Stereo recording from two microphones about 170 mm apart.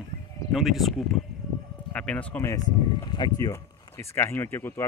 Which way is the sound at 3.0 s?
25° left (ahead or behind).